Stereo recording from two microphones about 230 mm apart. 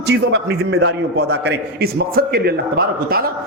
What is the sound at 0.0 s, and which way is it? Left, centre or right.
A man's voice, right.